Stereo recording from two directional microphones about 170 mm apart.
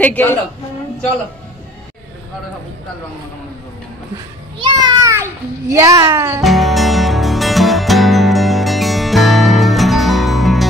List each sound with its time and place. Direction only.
0.0 s a woman's voice: 10° left (ahead or behind)
4.6 s a child's voice: 20° right (ahead or behind)
6.4 s music: centre (ahead or behind)